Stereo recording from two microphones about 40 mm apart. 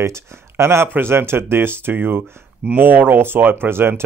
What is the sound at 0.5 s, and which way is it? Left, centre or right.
Speech, right.